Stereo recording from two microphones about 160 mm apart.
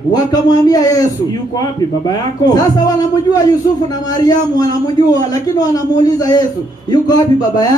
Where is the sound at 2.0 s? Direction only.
25° left (ahead or behind).